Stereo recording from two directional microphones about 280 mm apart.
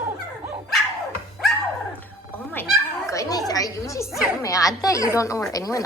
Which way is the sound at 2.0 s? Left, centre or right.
Centre.